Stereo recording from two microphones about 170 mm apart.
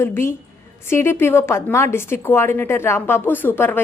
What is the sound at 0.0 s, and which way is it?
A woman's voice, 15° left (ahead or behind).